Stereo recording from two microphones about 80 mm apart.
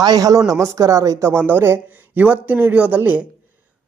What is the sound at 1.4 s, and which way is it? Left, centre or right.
Speech, right.